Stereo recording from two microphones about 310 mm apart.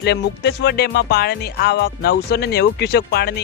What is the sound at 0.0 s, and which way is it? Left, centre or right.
Speech, left.